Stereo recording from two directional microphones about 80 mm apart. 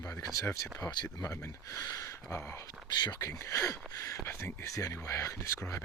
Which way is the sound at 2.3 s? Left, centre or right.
Left.